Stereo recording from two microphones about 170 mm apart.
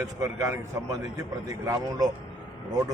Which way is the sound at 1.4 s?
20° right (ahead or behind).